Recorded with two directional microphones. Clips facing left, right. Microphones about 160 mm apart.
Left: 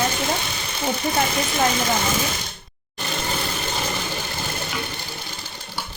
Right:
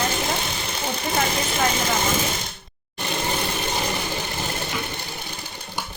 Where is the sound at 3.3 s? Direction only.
20° right (ahead or behind).